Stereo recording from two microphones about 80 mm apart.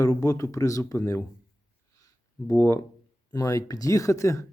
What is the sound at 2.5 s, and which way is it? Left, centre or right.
Speech, left.